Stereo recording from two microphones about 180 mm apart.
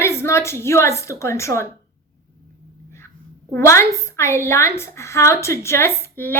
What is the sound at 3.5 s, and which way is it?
A woman's voice, 15° left (ahead or behind).